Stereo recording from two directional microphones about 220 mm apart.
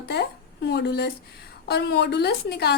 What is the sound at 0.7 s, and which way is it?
A woman's voice, 50° left (ahead or behind).